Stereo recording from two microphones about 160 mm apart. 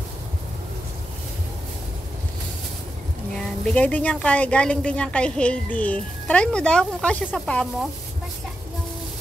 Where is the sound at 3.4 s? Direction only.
10° left (ahead or behind).